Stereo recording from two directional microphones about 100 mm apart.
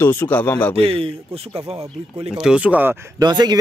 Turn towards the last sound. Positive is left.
turn(degrees=-45)  # may be behind; listen again after turning